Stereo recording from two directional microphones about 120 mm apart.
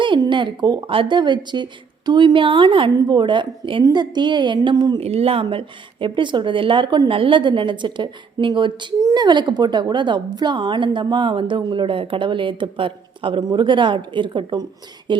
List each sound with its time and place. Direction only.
0.0 s a woman's voice: 40° right (ahead or behind)
4.9 s a woman's voice: 55° right (ahead or behind); by 15.2 s 40° right (ahead or behind)